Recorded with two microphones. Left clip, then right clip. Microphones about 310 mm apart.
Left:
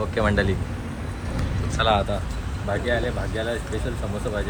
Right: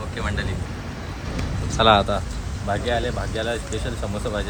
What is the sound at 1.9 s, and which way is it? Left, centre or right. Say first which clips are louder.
Speech: right 5 dB; right.